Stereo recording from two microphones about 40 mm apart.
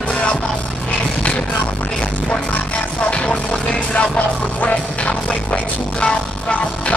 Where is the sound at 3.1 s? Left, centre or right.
Left.